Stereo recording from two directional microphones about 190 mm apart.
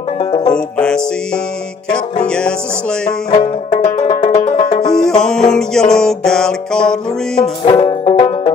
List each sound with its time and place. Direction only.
0.2 s music: 25° left (ahead or behind)
0.6 s music: 5° left (ahead or behind)
3.7 s banjo: 35° left (ahead or behind)
4.1 s music: 25° left (ahead or behind)
4.8 s music: 5° left (ahead or behind)
7.6 s music: 30° left (ahead or behind)